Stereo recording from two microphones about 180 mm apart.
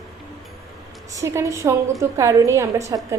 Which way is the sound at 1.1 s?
15° right (ahead or behind).